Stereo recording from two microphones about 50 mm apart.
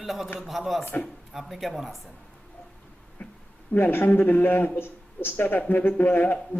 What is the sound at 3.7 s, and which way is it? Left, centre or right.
Speech, left.